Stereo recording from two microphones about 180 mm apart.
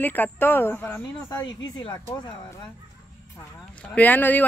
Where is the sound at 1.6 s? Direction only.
25° left (ahead or behind).